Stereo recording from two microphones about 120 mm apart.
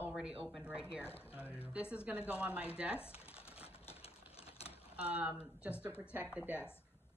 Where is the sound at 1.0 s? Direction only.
20° left (ahead or behind).